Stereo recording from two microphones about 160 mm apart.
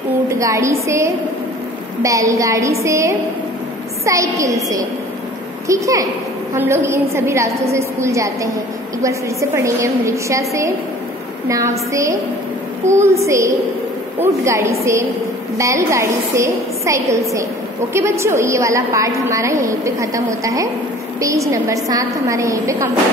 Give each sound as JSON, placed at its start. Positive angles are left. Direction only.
{"t": 0.3, "sound": "a woman's voice", "side_deg": -20}